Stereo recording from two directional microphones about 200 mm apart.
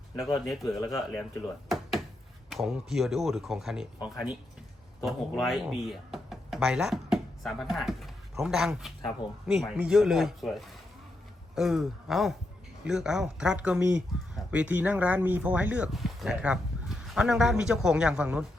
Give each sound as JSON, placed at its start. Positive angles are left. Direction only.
{"t": 0.2, "sound": "speech", "side_deg": 0}
{"t": 2.5, "sound": "speech", "side_deg": 0}